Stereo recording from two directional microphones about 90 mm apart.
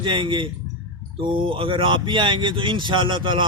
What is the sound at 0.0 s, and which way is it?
A man's voice, 60° right (ahead or behind).